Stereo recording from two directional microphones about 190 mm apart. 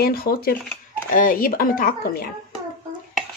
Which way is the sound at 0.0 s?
55° left (ahead or behind).